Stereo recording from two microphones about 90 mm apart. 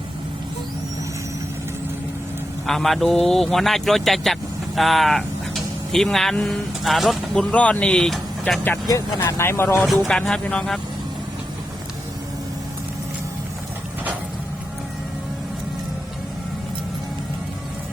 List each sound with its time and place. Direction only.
2.6 s a man's voice: 5° left (ahead or behind)
7.3 s speech: 15° left (ahead or behind)
8.9 s speech: 40° left (ahead or behind)
9.2 s speech: 25° left (ahead or behind)
9.8 s speech: centre (ahead or behind)
10.2 s speech: 10° left (ahead or behind)